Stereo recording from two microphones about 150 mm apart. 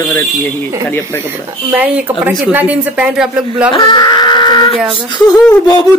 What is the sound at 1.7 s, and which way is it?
A woman's voice, 10° right (ahead or behind).